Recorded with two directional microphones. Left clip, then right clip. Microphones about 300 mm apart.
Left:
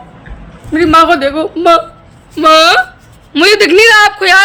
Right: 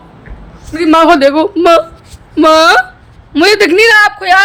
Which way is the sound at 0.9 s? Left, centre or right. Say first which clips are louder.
Right 2 dB; centre.